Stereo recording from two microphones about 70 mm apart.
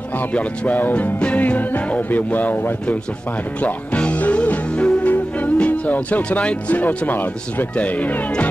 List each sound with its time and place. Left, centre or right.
0.3 s music: centre
5.1 s speech: left